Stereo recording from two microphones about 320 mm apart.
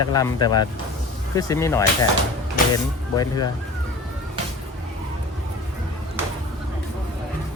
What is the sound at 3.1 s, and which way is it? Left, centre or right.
Speech, centre.